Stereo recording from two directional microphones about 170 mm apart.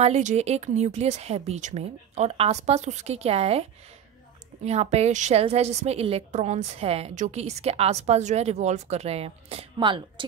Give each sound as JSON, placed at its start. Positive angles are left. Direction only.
{"t": 0.0, "sound": "a woman's voice", "side_deg": -45}
{"t": 4.6, "sound": "a woman's voice", "side_deg": -40}